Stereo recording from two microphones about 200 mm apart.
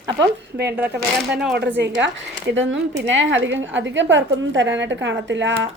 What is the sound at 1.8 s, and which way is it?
A woman's voice, 65° right (ahead or behind).